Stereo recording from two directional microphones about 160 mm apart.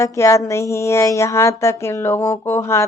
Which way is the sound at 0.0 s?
20° left (ahead or behind).